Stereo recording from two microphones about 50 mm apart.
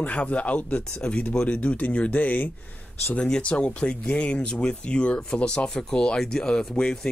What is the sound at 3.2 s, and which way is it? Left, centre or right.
Speech, centre.